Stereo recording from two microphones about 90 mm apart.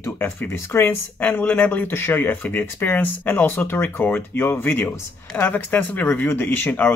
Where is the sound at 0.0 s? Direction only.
25° left (ahead or behind).